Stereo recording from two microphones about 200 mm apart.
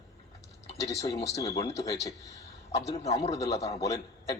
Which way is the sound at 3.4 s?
15° left (ahead or behind).